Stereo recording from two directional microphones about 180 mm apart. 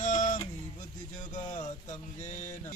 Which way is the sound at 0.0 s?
45° left (ahead or behind).